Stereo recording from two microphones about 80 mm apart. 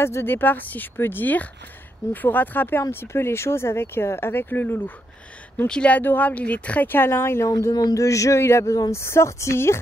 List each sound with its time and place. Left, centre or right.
0.0 s speech: left
7.5 s a woman's voice: left